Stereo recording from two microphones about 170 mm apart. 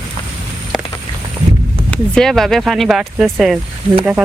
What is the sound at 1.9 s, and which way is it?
Speech, 5° left (ahead or behind).